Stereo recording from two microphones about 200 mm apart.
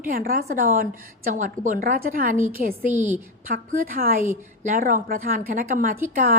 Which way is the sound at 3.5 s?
45° right (ahead or behind).